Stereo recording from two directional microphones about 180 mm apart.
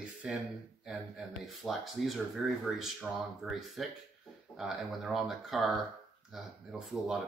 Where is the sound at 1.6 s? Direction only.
Centre (ahead or behind).